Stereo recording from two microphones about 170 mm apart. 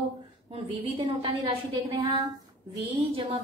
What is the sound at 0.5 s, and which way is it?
A woman's voice, 35° right (ahead or behind).